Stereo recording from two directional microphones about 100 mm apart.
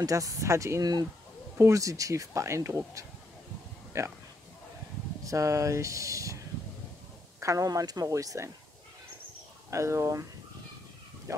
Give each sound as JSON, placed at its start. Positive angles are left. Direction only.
{"t": 0.0, "sound": "speech", "side_deg": -35}
{"t": 5.2, "sound": "speech", "side_deg": -35}
{"t": 7.3, "sound": "speech", "side_deg": -30}
{"t": 9.7, "sound": "speech", "side_deg": -30}
{"t": 11.3, "sound": "speech", "side_deg": -30}